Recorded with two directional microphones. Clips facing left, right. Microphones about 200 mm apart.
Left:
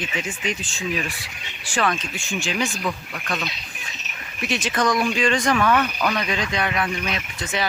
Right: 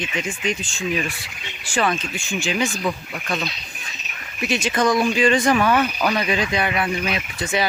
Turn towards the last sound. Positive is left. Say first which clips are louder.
# right 4 dB
turn(degrees=-10)  # may be behind; listen again after turning